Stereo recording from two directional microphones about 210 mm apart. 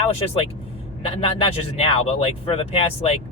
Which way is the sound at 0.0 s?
30° left (ahead or behind).